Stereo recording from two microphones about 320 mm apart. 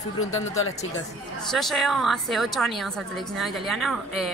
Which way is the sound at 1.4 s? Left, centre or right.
Centre.